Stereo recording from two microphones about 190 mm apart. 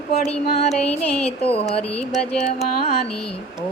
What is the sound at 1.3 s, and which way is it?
Speech, 30° left (ahead or behind).